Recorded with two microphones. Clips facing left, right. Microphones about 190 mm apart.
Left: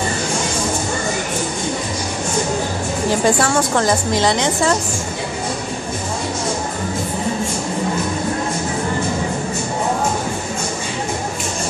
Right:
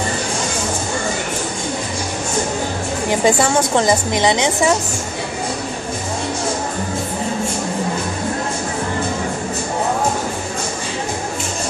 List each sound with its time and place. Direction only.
3.1 s a woman's voice: 15° right (ahead or behind)